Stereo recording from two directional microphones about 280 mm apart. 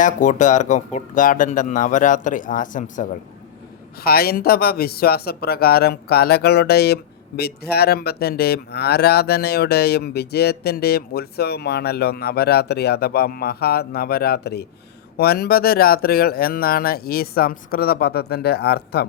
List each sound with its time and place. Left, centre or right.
0.0 s speech: left